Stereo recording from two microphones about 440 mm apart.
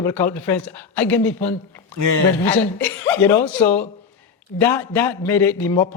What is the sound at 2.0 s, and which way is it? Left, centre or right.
Speech, right.